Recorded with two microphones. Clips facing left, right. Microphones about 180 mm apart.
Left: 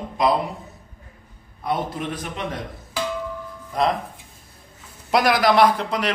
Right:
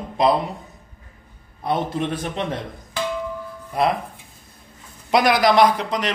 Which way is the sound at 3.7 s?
10° right (ahead or behind).